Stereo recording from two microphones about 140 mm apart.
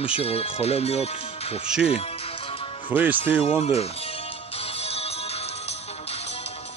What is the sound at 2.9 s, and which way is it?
Music, 10° right (ahead or behind).